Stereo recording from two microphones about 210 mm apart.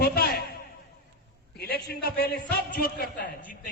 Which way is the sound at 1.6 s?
45° left (ahead or behind).